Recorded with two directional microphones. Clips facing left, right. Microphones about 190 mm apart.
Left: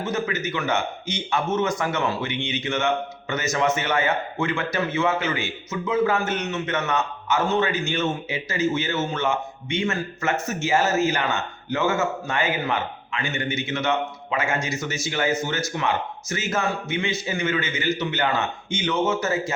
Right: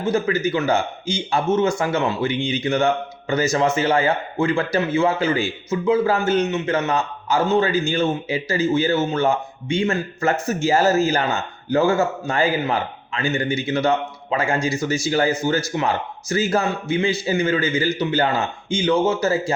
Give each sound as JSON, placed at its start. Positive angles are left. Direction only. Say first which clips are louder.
{"t": 0.0, "sound": "speech", "louder": "right 6 dB", "side_deg": -30}